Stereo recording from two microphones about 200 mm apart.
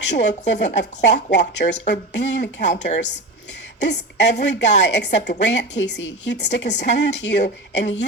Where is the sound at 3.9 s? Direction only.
60° left (ahead or behind).